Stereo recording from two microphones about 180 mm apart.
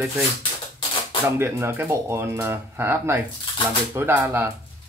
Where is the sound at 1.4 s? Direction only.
15° right (ahead or behind).